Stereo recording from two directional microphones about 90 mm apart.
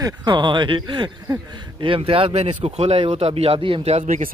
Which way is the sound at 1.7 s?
80° right.